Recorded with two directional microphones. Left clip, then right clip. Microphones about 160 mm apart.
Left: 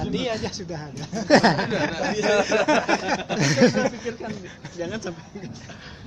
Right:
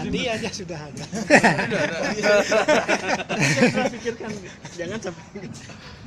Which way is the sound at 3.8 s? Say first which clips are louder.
Right 1 dB; 55° left (ahead or behind).